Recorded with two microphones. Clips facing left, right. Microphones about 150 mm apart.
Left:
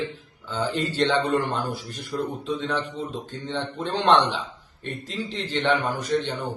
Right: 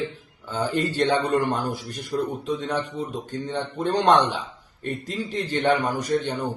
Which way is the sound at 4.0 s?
45° right (ahead or behind).